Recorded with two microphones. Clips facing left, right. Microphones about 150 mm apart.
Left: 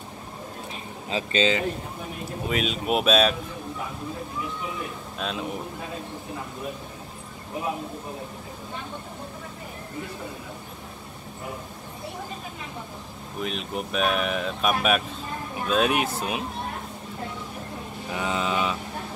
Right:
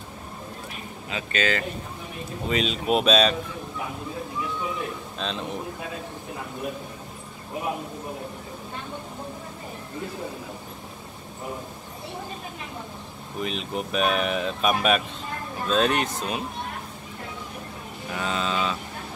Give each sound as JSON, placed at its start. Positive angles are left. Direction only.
{"t": 1.1, "sound": "speech", "side_deg": 25}
{"t": 2.4, "sound": "speech", "side_deg": 5}
{"t": 5.2, "sound": "speech", "side_deg": 5}
{"t": 13.4, "sound": "speech", "side_deg": 0}
{"t": 18.1, "sound": "speech", "side_deg": 15}